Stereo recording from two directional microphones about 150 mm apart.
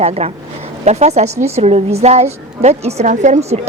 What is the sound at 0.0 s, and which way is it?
A woman's voice, 45° right (ahead or behind).